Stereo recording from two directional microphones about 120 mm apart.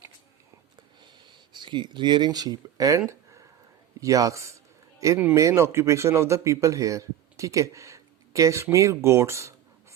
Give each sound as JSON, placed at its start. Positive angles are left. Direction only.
{"t": 1.0, "sound": "speech", "side_deg": -40}
{"t": 4.0, "sound": "a man's voice", "side_deg": -30}